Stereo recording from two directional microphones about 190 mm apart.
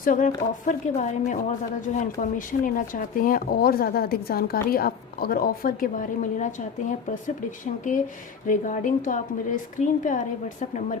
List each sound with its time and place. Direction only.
0.0 s a woman's voice: 45° left (ahead or behind)